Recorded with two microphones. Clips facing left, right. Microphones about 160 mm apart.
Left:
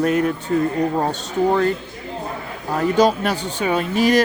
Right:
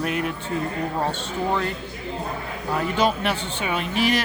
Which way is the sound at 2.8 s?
40° left (ahead or behind).